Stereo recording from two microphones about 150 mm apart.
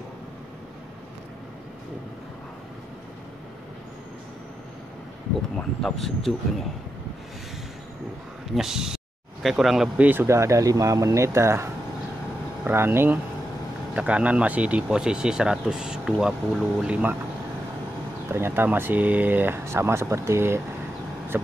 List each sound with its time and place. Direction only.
5.6 s speech: centre (ahead or behind)
8.5 s speech: 5° right (ahead or behind)
18.3 s speech: 15° right (ahead or behind)